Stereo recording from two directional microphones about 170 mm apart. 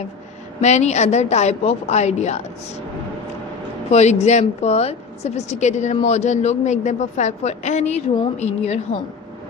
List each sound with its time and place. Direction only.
0.6 s a woman's voice: 40° left (ahead or behind)
3.8 s a woman's voice: 40° left (ahead or behind)